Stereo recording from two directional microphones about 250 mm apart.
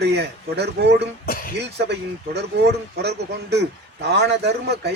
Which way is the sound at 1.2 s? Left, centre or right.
Left.